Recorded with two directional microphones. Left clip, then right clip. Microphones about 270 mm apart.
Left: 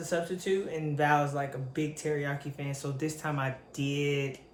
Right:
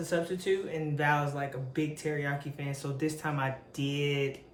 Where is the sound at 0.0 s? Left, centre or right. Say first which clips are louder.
Even; centre.